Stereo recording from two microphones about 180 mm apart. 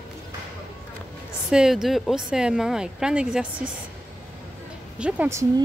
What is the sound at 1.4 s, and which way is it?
Speech, 5° right (ahead or behind).